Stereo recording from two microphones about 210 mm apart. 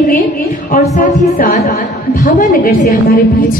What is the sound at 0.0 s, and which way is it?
A woman's voice, 40° left (ahead or behind).